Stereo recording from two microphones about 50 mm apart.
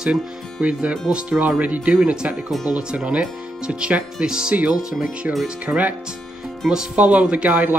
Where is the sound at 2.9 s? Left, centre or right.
Right.